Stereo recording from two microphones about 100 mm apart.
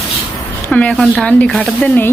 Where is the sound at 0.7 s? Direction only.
10° left (ahead or behind).